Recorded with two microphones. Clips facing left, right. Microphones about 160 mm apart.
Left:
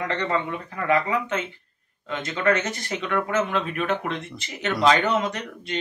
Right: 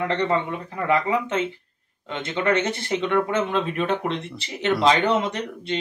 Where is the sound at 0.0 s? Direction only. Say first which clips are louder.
Right 3 dB; 25° right (ahead or behind).